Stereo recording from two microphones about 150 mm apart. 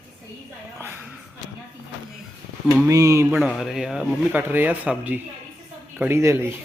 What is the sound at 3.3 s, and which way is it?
Speech, 5° right (ahead or behind).